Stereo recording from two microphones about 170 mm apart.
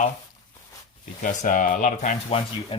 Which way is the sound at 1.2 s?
50° left (ahead or behind).